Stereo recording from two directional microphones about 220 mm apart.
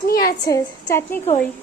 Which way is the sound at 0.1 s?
40° left (ahead or behind).